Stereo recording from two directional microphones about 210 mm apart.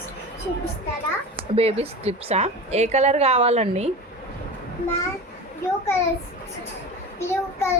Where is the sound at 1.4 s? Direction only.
30° right (ahead or behind).